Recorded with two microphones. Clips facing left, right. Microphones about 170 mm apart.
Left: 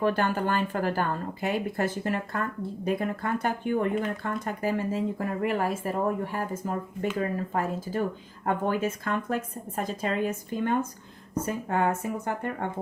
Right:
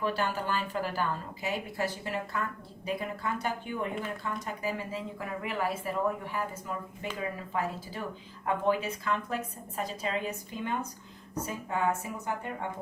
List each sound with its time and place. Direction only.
0.0 s speech: 50° left (ahead or behind)